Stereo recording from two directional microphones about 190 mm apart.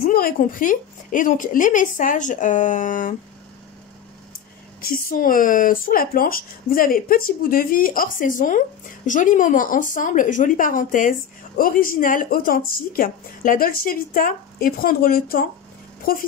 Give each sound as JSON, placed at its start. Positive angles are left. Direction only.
{"t": 0.0, "sound": "speech", "side_deg": 50}
{"t": 4.8, "sound": "speech", "side_deg": 50}